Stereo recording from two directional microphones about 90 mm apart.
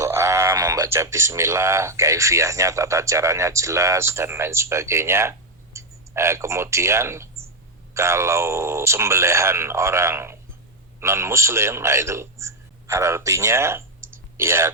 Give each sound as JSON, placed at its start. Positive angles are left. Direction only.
{"t": 0.0, "sound": "speech", "side_deg": -30}